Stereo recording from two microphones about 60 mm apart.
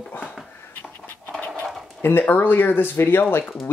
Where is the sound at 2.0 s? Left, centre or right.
Left.